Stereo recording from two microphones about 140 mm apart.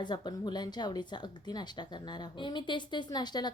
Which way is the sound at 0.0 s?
30° left (ahead or behind).